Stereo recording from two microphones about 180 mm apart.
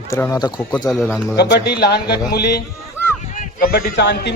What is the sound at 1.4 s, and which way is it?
A man's voice, 70° left (ahead or behind).